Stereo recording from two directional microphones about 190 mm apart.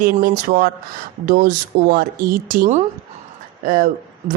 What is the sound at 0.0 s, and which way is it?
A woman's voice, 50° right (ahead or behind).